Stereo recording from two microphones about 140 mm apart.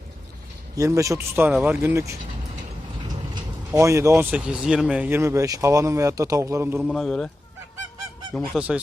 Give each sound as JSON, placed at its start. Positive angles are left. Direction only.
{"t": 0.8, "sound": "speech", "side_deg": -20}
{"t": 3.7, "sound": "speech", "side_deg": -20}
{"t": 6.7, "sound": "a man's voice", "side_deg": 0}
{"t": 8.5, "sound": "speech", "side_deg": -10}